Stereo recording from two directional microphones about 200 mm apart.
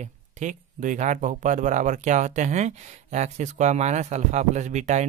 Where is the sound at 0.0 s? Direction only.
35° right (ahead or behind).